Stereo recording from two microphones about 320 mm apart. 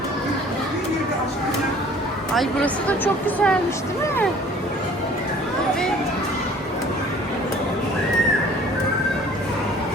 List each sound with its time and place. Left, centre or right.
2.3 s speech: centre